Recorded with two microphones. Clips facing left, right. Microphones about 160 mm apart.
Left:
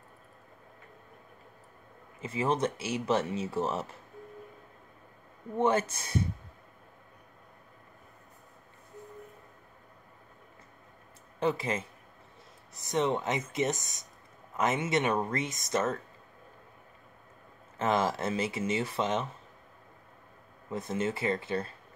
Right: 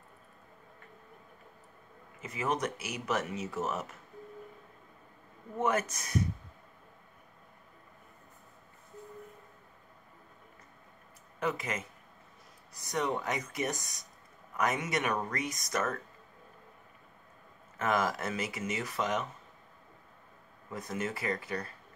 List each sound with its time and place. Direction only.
2.1 s speech: 30° left (ahead or behind)
5.6 s speech: 30° left (ahead or behind)
11.3 s speech: 30° left (ahead or behind)
17.7 s speech: 25° left (ahead or behind)
20.7 s speech: 25° left (ahead or behind)